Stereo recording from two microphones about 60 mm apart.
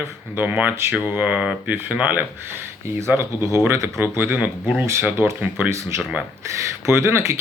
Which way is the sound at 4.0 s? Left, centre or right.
Right.